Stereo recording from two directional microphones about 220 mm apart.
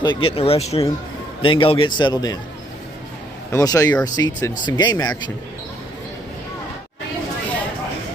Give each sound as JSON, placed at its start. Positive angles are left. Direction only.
{"t": 0.0, "sound": "speech", "side_deg": 20}
{"t": 3.5, "sound": "speech", "side_deg": 15}